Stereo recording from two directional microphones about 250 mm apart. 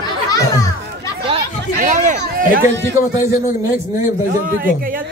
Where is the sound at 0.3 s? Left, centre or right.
Centre.